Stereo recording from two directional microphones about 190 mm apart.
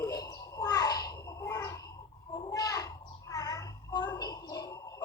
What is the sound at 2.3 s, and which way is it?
Child singing, 20° left (ahead or behind).